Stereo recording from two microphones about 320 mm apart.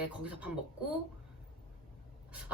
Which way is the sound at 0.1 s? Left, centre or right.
Centre.